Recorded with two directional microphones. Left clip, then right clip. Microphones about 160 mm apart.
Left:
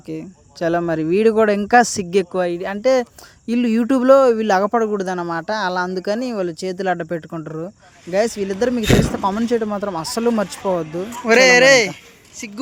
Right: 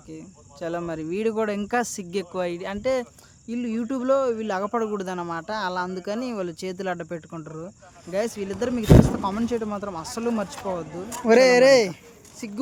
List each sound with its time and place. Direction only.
0.1 s speech: 40° left (ahead or behind)
2.4 s speech: 30° left (ahead or behind)
3.4 s speech: 60° left (ahead or behind); by 10.8 s 40° left (ahead or behind)
11.3 s a woman's voice: 15° right (ahead or behind)